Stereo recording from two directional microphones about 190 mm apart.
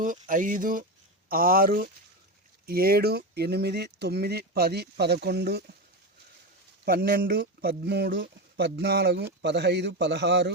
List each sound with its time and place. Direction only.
0.0 s speech: 45° right (ahead or behind)
6.8 s speech: 50° right (ahead or behind)